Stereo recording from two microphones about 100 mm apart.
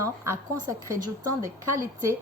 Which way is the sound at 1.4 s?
30° right (ahead or behind).